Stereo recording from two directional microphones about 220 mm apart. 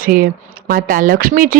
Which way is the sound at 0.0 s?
40° right (ahead or behind).